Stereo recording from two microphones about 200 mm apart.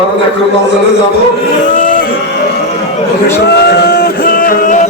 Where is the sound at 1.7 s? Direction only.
40° left (ahead or behind).